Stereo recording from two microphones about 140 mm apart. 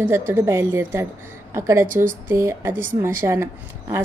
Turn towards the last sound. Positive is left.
turn(degrees=-20)  # may be behind; listen again after turning